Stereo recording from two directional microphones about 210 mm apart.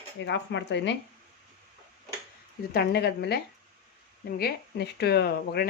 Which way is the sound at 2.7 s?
50° left (ahead or behind).